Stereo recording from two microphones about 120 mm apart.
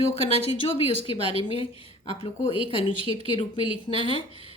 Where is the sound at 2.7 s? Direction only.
50° left (ahead or behind).